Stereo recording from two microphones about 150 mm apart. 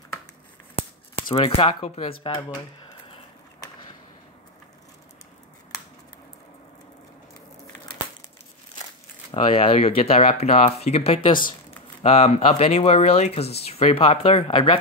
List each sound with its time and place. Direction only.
0.7 s speech: 40° left (ahead or behind)
9.3 s speech: 35° left (ahead or behind)